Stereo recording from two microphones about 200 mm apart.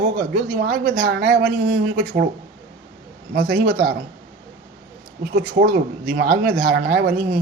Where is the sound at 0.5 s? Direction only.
45° right (ahead or behind).